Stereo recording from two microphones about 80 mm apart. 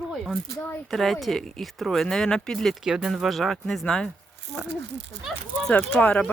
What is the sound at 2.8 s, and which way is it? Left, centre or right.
Speech, centre.